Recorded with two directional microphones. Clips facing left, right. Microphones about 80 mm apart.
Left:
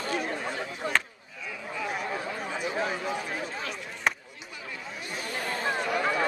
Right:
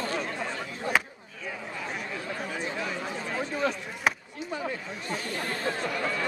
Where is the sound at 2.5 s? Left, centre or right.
Centre.